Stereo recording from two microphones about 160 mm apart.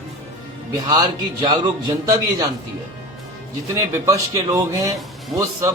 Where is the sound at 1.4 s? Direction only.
25° right (ahead or behind).